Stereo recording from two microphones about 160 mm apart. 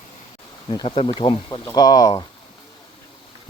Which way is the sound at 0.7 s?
30° left (ahead or behind).